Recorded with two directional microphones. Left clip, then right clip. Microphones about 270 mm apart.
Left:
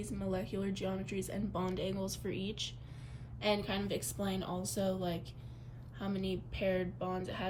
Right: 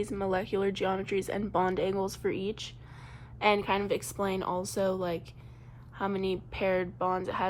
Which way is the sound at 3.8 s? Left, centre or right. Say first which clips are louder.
Right 8 dB; centre.